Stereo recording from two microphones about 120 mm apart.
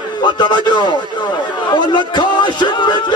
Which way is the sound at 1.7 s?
40° left (ahead or behind).